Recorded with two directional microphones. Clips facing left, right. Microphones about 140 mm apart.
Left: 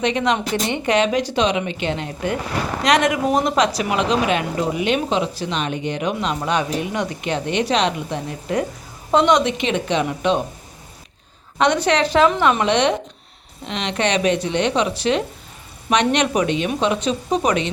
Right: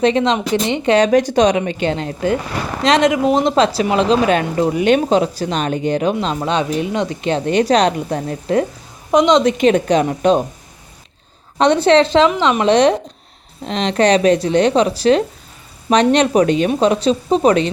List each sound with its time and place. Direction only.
0.0 s speech: 30° right (ahead or behind)
0.9 s speech: 45° right (ahead or behind)
9.1 s speech: 20° right (ahead or behind)
9.4 s speech: 40° right (ahead or behind)
11.5 s speech: 30° right (ahead or behind)
12.6 s speech: 35° right (ahead or behind)